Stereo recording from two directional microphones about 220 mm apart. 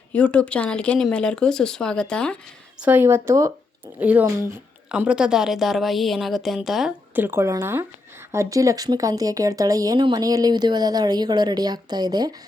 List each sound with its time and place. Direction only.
0.1 s a woman's voice: 5° left (ahead or behind)
2.8 s a woman's voice: 10° right (ahead or behind)